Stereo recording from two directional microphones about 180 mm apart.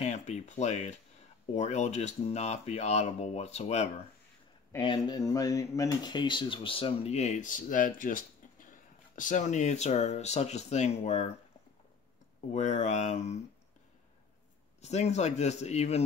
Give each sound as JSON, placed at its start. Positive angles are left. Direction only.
{"t": 0.0, "sound": "speech", "side_deg": 40}
{"t": 4.7, "sound": "speech", "side_deg": 25}
{"t": 12.5, "sound": "speech", "side_deg": 40}
{"t": 14.8, "sound": "speech", "side_deg": 35}